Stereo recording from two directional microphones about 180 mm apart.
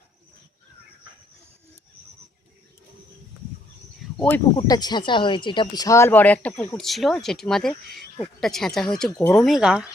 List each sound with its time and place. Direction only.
4.5 s speech: 20° left (ahead or behind); by 9.1 s 5° left (ahead or behind)
9.1 s speech: 15° left (ahead or behind)
9.4 s speech: centre (ahead or behind)